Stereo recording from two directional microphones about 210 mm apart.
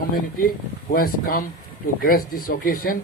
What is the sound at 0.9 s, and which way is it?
A man's voice, 40° left (ahead or behind).